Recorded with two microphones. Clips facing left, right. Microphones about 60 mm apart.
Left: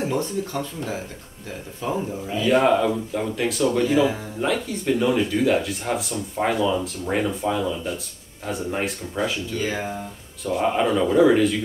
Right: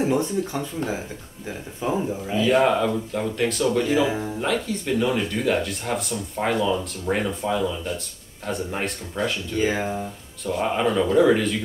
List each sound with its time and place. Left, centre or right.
1.8 s speech: centre
2.2 s speech: centre
9.6 s speech: centre
10.4 s speech: centre